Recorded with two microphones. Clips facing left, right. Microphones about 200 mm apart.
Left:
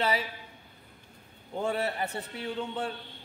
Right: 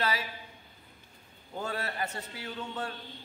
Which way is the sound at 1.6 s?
25° left (ahead or behind).